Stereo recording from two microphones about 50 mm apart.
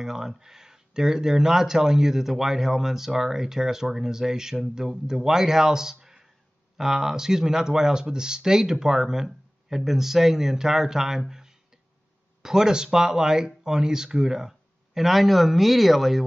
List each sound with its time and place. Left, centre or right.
0.0 s speech: centre